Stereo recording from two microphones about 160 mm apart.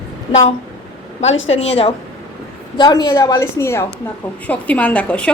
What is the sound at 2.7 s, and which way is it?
A woman's voice, 25° left (ahead or behind).